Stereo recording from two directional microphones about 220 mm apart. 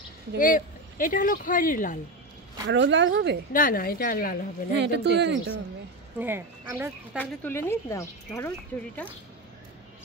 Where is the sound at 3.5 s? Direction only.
40° left (ahead or behind).